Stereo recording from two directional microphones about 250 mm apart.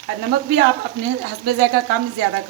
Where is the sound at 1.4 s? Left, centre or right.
Right.